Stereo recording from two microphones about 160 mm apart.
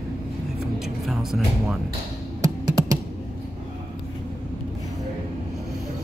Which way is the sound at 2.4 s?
20° right (ahead or behind).